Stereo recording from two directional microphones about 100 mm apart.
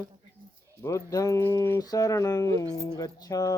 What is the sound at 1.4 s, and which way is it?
Speech, 20° left (ahead or behind).